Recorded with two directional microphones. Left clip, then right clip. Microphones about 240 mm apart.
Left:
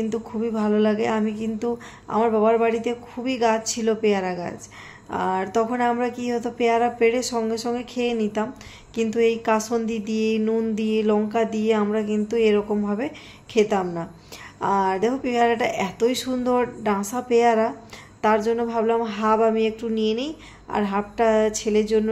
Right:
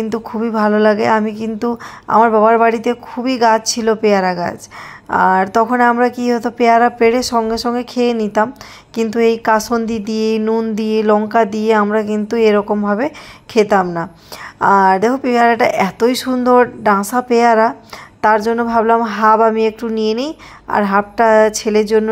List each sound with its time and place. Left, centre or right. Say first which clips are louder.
0.0 s speech: right 6 dB; right